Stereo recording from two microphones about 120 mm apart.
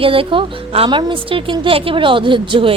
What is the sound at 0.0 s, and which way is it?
A woman's voice, 50° right (ahead or behind).